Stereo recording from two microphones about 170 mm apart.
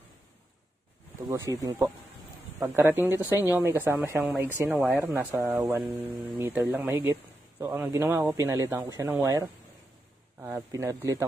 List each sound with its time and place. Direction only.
1.2 s speech: 20° right (ahead or behind)